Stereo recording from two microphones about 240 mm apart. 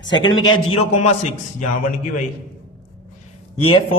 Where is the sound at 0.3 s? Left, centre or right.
Left.